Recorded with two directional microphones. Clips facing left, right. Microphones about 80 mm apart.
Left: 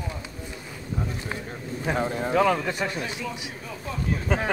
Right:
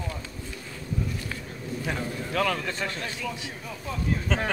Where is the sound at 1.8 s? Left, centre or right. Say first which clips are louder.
Left 7 dB; left.